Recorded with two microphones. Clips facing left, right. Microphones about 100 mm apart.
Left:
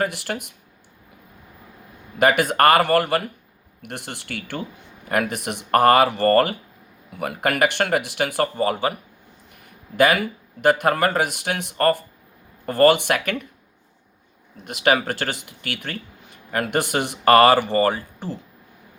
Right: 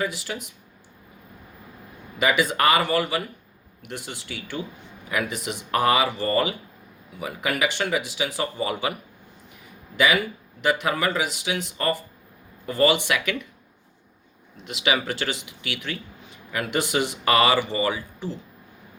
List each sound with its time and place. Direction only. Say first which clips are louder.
0.0 s speech: left 4 dB; 60° left (ahead or behind)
2.1 s speech: left 4 dB; 55° left (ahead or behind)
10.0 s speech: left 4 dB; 50° left (ahead or behind)
14.5 s speech: left 5 dB; 50° left (ahead or behind)